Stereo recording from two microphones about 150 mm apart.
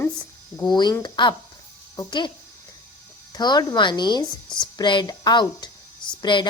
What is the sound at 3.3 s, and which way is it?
Speech, 25° left (ahead or behind).